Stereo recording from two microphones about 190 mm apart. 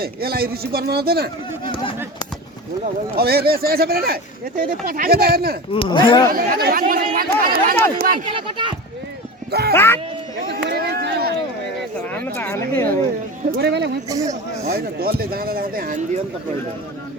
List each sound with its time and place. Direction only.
0.0 s speech: 55° right (ahead or behind)
1.6 s speech: 25° left (ahead or behind)
3.2 s speech: 55° right (ahead or behind)
5.7 s speech: 25° left (ahead or behind)
6.3 s speech: 50° right (ahead or behind)
8.3 s speech: 25° right (ahead or behind)
9.5 s speech: 55° right (ahead or behind)
9.7 s speech: 10° left (ahead or behind)
10.5 s a sound: 60° right (ahead or behind)
11.9 s a sound: 10° left (ahead or behind)
13.6 s speech: 60° right (ahead or behind)